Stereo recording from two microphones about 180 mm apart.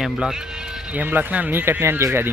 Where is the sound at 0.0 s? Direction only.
Centre (ahead or behind).